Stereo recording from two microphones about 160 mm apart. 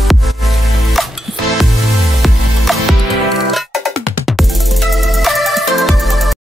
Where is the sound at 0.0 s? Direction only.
Centre (ahead or behind).